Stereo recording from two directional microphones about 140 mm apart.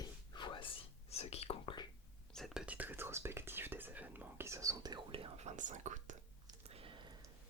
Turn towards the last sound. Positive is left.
turn(degrees=-35)  # may be behind; listen again after turning